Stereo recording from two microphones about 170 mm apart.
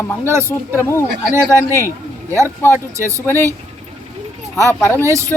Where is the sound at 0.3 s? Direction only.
15° right (ahead or behind).